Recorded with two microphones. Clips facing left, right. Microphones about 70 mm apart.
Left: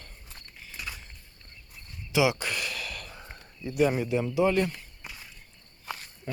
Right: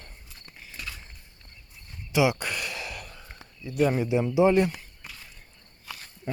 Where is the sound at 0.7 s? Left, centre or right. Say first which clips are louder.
Even; centre.